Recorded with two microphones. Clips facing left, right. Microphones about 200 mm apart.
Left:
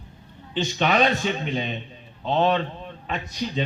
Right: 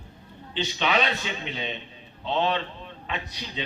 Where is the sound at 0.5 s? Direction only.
45° left (ahead or behind).